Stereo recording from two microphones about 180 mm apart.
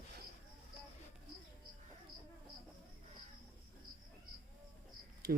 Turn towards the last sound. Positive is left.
turn(degrees=-60)  # may be behind; listen again after turning